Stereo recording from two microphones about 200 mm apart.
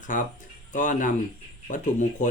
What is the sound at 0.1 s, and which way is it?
A man's voice, 40° left (ahead or behind).